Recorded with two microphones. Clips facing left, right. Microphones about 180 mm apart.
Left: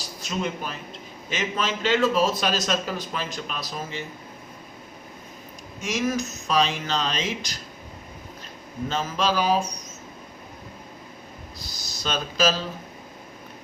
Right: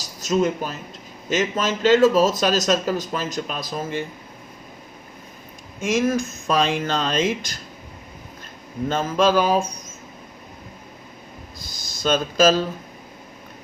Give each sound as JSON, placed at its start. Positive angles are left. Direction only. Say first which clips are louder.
{"t": 0.0, "sound": "speech", "louder": "right 9 dB", "side_deg": -45}
{"t": 5.8, "sound": "speech", "louder": "right 5 dB", "side_deg": -50}
{"t": 8.9, "sound": "speech", "louder": "right 6 dB", "side_deg": -50}
{"t": 11.8, "sound": "speech", "louder": "right 8 dB", "side_deg": -50}